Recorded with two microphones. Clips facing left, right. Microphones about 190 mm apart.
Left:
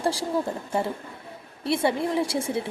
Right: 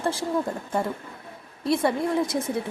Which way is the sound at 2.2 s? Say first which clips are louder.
Even; 10° left (ahead or behind).